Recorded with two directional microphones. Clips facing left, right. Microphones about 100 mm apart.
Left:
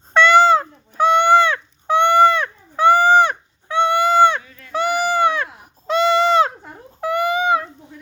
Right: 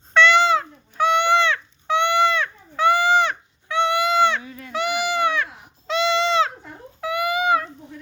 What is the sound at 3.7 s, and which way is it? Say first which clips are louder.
Goat: left 4 dB; 35° left (ahead or behind).